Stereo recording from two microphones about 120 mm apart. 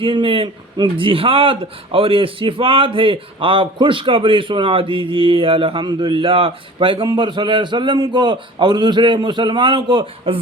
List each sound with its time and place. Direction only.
0.0 s a man's voice: 45° right (ahead or behind)